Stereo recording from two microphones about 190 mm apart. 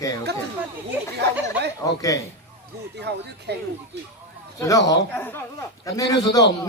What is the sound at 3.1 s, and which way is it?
Speech, 60° right (ahead or behind).